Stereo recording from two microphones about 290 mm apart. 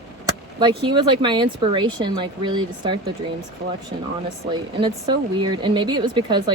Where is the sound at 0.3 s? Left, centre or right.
Centre.